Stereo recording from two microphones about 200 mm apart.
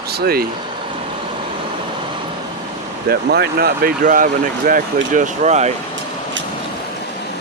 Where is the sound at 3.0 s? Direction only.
50° right (ahead or behind); by 5.7 s 35° right (ahead or behind).